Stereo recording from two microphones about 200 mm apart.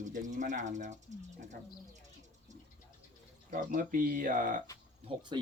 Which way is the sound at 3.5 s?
40° right (ahead or behind).